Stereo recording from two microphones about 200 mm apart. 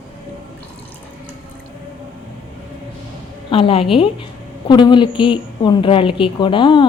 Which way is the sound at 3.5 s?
25° left (ahead or behind).